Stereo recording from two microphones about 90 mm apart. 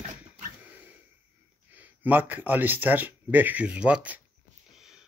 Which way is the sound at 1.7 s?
20° right (ahead or behind).